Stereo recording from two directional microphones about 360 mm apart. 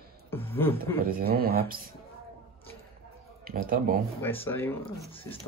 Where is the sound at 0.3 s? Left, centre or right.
Centre.